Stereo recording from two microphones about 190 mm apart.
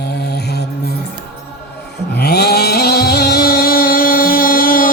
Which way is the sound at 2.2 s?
60° left (ahead or behind).